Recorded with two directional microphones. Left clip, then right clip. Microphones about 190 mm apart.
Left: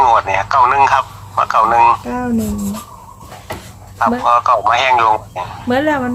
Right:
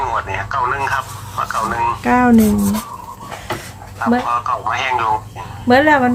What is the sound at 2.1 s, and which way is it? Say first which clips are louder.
Speech: right 8 dB; 45° right (ahead or behind).